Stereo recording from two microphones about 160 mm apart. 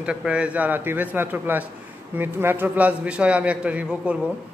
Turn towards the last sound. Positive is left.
turn(degrees=-10)  # may be behind; listen again after turning